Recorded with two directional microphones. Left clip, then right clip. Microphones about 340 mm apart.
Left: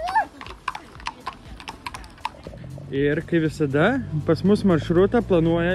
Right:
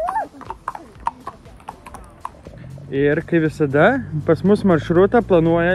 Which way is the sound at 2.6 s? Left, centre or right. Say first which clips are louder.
Right 5 dB; centre.